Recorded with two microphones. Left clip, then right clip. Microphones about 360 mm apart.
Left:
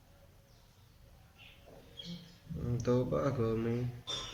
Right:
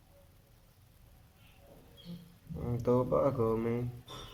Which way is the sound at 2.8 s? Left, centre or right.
Centre.